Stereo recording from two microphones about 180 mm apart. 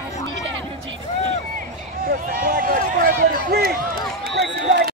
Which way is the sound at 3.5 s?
60° right (ahead or behind).